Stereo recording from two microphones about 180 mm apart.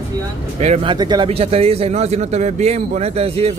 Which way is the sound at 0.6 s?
35° right (ahead or behind).